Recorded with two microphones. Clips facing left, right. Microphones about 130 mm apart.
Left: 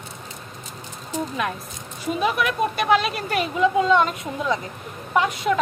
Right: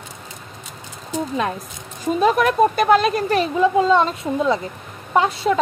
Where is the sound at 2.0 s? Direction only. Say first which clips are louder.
Right 6 dB; 40° right (ahead or behind).